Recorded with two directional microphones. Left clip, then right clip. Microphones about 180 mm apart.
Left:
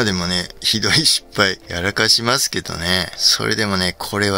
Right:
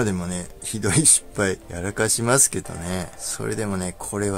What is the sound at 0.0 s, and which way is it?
Speech, 15° left (ahead or behind).